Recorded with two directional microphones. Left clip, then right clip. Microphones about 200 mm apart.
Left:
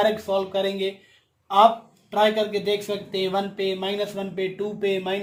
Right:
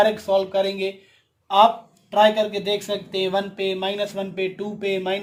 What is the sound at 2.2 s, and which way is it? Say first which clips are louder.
Speech: right 3 dB; 45° right (ahead or behind).